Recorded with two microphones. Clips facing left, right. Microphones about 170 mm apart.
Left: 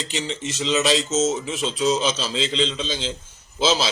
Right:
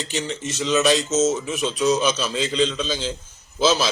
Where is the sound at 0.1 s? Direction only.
20° left (ahead or behind).